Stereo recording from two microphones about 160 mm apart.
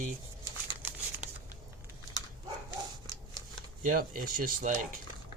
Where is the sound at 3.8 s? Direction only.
60° right (ahead or behind).